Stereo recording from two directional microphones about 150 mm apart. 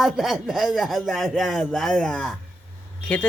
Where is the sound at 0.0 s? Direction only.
Centre (ahead or behind).